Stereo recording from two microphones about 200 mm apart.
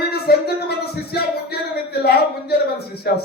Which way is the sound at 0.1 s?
50° left (ahead or behind).